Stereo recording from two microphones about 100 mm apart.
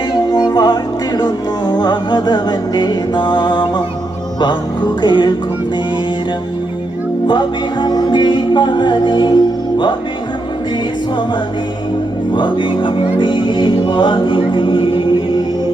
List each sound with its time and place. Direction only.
0.3 s music: 40° left (ahead or behind)
5.0 s music: 50° left (ahead or behind)
7.3 s music: 50° left (ahead or behind)
12.3 s music: 55° left (ahead or behind)